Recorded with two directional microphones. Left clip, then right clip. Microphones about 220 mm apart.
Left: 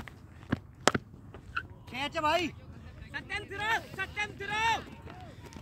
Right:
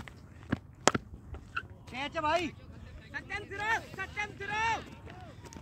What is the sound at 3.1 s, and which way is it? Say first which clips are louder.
Speech: left 2 dB; 30° left (ahead or behind).